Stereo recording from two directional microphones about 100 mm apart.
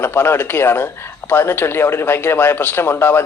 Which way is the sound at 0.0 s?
20° left (ahead or behind).